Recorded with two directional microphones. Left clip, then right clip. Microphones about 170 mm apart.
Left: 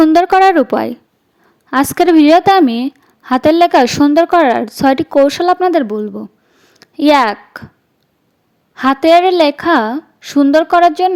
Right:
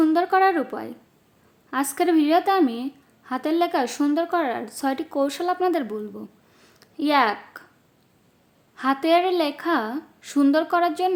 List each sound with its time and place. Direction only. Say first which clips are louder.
0.1 s a woman's voice: left 11 dB; 55° left (ahead or behind)
6.5 s a sound: left 5 dB; 30° left (ahead or behind)
6.7 s speech: left 10 dB; 45° left (ahead or behind)
8.7 s a woman's voice: left 11 dB; 45° left (ahead or behind)